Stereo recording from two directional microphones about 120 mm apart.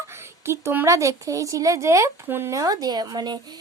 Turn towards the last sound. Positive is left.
turn(degrees=-35)  # may be behind; listen again after turning